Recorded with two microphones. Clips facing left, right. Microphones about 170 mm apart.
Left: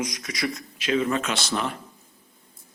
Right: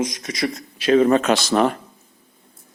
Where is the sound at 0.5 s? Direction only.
40° right (ahead or behind).